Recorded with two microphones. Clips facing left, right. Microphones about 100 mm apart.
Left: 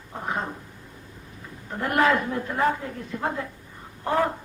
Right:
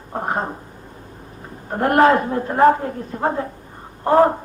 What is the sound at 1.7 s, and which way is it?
A woman's voice, 50° right (ahead or behind).